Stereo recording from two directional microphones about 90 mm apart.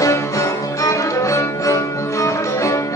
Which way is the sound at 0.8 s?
35° left (ahead or behind).